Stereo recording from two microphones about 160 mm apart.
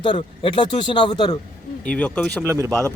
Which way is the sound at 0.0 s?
30° left (ahead or behind).